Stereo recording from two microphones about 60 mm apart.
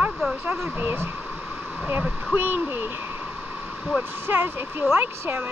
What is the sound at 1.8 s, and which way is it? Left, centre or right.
Speech, right.